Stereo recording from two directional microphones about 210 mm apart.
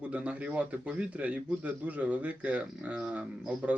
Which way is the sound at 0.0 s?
5° right (ahead or behind).